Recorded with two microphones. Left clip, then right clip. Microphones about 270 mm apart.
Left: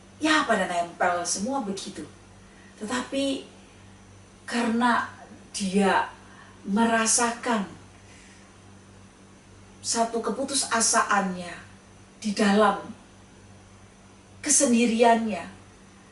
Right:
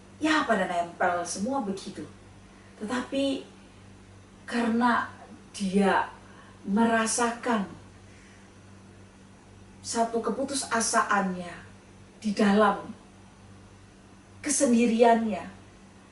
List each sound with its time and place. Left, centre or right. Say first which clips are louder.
0.2 s a woman's voice: left 2 dB; centre
2.8 s speech: left 2 dB; centre
4.4 s a woman's voice: left 2 dB; centre
9.9 s speech: left 1 dB; centre
14.4 s a woman's voice: left 2 dB; centre